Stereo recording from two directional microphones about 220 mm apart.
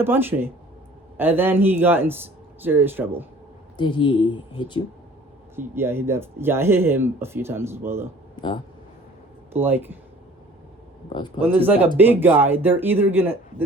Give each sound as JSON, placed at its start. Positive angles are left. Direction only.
{"t": 0.0, "sound": "speech", "side_deg": -10}
{"t": 3.8, "sound": "speech", "side_deg": 20}
{"t": 5.5, "sound": "speech", "side_deg": -10}
{"t": 8.4, "sound": "speech", "side_deg": 20}
{"t": 9.5, "sound": "speech", "side_deg": -10}
{"t": 11.4, "sound": "speech", "side_deg": -10}